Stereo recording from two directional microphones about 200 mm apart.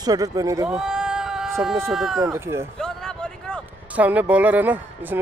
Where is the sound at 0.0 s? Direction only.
20° right (ahead or behind).